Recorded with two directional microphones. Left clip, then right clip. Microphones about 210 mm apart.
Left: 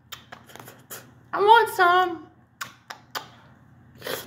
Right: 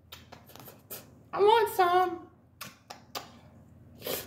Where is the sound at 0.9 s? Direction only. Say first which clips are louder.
Left 6 dB; 10° right (ahead or behind).